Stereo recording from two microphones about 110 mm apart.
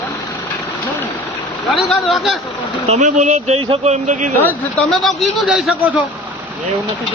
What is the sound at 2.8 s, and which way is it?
Speech, 80° right.